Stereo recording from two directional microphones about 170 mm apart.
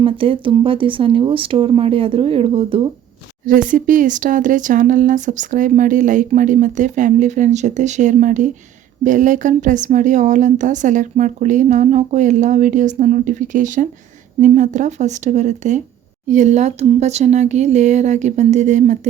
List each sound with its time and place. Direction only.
0.0 s speech: 30° right (ahead or behind)
3.4 s speech: 50° right (ahead or behind)